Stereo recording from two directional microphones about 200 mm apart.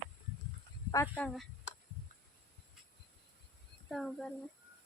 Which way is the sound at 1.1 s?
5° left (ahead or behind).